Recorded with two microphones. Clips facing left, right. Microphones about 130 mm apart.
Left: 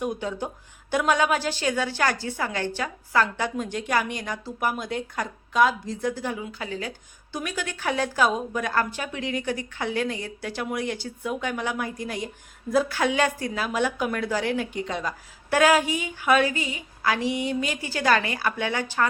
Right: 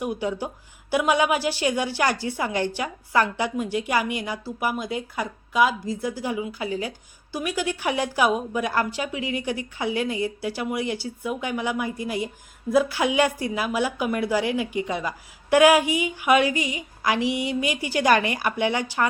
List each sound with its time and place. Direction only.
0.0 s a woman's voice: 10° right (ahead or behind)